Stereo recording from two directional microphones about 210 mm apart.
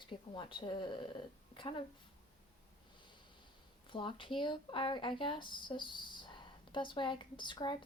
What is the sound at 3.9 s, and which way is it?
A woman's voice, 25° left (ahead or behind).